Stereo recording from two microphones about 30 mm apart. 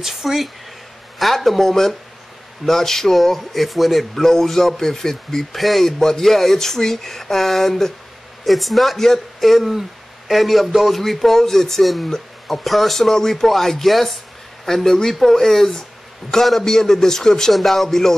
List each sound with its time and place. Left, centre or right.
0.0 s speech: centre
4.2 s speech: centre
5.6 s speech: centre
5.9 s a man's voice: centre
11.8 s speech: centre
13.1 s speech: centre
14.7 s a man's voice: centre
17.5 s speech: centre